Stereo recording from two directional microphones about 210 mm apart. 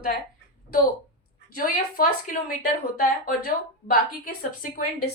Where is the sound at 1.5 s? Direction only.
40° left (ahead or behind).